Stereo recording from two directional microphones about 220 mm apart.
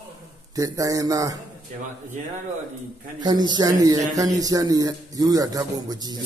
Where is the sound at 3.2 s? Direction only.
20° right (ahead or behind).